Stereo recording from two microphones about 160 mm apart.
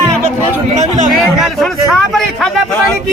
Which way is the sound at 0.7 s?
50° right (ahead or behind).